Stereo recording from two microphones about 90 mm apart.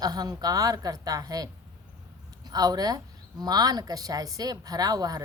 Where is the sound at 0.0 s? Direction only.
45° right (ahead or behind).